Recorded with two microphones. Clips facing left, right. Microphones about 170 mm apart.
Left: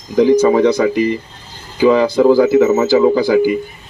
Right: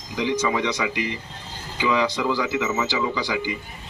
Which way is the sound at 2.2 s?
50° left (ahead or behind).